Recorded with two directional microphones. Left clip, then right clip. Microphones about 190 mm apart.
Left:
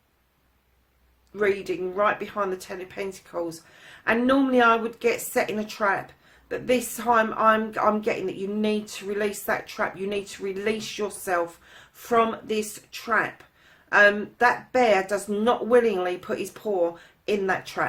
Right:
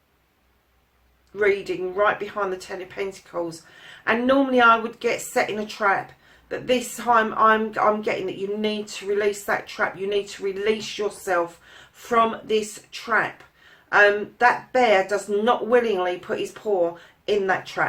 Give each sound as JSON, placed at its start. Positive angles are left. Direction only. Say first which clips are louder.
{"t": 1.4, "sound": "speech", "louder": "right 3 dB", "side_deg": 30}